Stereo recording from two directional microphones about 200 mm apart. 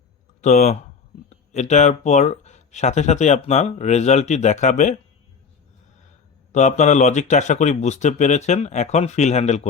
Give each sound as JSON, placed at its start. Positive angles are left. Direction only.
{"t": 0.4, "sound": "speech", "side_deg": 35}
{"t": 6.5, "sound": "speech", "side_deg": 35}